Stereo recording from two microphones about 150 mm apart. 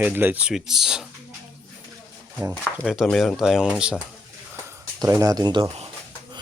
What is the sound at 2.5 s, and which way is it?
Speech, centre (ahead or behind).